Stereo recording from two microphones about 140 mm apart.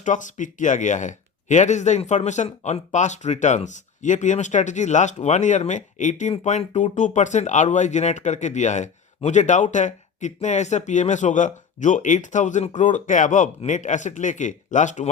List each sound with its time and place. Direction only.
0.0 s speech: 65° left (ahead or behind)